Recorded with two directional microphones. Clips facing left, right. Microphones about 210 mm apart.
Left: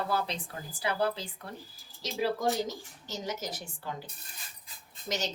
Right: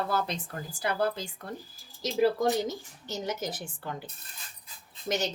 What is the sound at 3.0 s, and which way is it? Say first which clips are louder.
Speech: right 3 dB; 55° right (ahead or behind).